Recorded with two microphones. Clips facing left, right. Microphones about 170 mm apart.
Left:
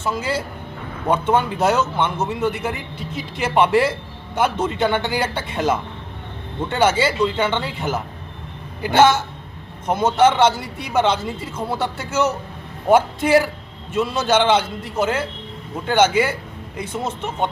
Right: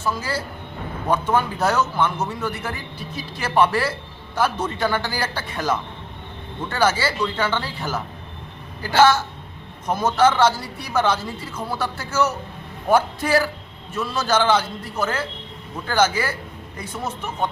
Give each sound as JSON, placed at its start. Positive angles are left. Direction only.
{"t": 0.0, "sound": "a man's voice", "side_deg": 25}